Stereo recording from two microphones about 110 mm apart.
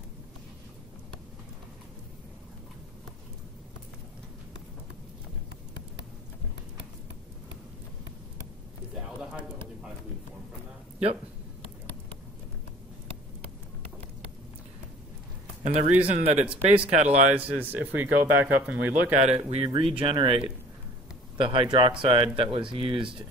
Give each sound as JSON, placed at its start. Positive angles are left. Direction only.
{"t": 15.6, "sound": "speech", "side_deg": -85}
{"t": 16.1, "sound": "speech", "side_deg": -70}
{"t": 16.9, "sound": "speech", "side_deg": -90}
{"t": 17.3, "sound": "speech", "side_deg": -15}
{"t": 19.1, "sound": "speech", "side_deg": -80}